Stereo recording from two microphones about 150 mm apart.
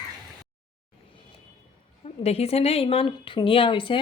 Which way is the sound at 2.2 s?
45° left (ahead or behind).